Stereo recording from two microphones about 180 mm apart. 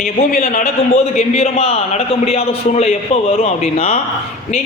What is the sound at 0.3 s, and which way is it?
Speech, 50° left (ahead or behind).